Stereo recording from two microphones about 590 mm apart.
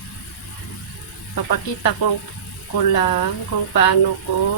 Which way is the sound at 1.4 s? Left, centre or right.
Left.